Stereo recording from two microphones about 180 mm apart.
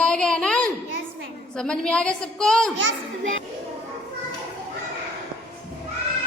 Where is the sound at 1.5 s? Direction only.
5° left (ahead or behind).